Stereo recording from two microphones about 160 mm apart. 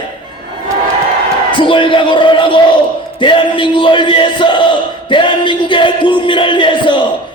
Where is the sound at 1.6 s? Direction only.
30° left (ahead or behind).